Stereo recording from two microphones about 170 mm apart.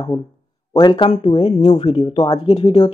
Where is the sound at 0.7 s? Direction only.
25° left (ahead or behind).